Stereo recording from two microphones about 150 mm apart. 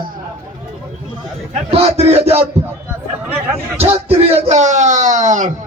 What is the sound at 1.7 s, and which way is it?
Speech, 45° right (ahead or behind).